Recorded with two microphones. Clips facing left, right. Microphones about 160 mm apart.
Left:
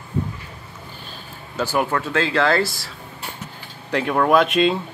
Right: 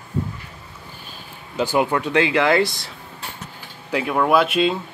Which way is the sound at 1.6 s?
15° right (ahead or behind).